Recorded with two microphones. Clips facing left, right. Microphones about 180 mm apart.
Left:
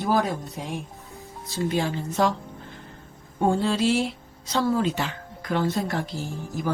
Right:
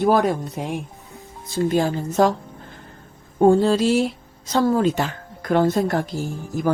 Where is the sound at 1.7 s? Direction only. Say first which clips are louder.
Right 5 dB; 45° right (ahead or behind).